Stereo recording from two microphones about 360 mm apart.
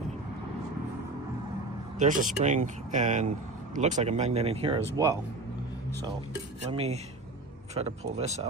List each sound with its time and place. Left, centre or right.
2.0 s speech: right
6.7 s speech: centre